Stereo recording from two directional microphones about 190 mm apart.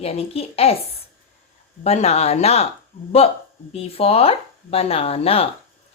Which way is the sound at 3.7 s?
30° left (ahead or behind).